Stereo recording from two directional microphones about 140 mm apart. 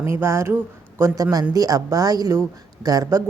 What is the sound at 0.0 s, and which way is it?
A woman's voice, 20° right (ahead or behind).